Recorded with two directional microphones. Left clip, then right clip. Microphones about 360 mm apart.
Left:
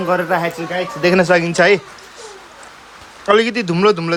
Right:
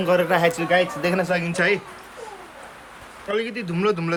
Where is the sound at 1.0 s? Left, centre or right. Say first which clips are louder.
Left 9 dB; left.